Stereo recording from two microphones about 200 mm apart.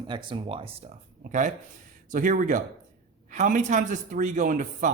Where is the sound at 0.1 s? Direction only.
25° right (ahead or behind).